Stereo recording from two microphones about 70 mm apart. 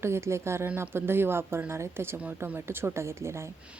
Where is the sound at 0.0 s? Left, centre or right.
Right.